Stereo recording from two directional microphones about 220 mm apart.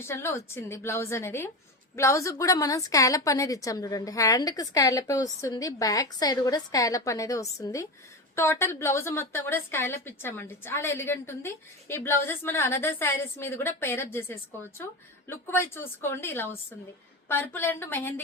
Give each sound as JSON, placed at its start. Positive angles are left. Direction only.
{"t": 0.0, "sound": "a woman's voice", "side_deg": 10}